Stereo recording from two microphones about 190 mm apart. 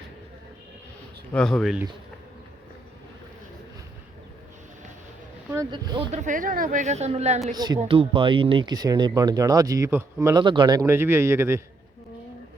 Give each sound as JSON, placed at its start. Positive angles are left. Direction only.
{"t": 1.3, "sound": "speech", "side_deg": 5}
{"t": 5.7, "sound": "speech", "side_deg": -25}
{"t": 6.1, "sound": "a woman's voice", "side_deg": -40}
{"t": 7.5, "sound": "speech", "side_deg": -20}